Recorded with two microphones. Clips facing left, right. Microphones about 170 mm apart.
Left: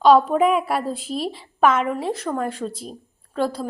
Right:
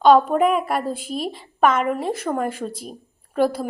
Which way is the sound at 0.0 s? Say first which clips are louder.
Even; centre (ahead or behind).